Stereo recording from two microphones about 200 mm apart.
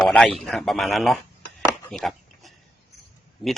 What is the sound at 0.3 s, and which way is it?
A man's voice, centre (ahead or behind).